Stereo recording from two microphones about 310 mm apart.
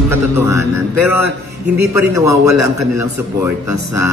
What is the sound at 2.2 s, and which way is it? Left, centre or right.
Speech, right.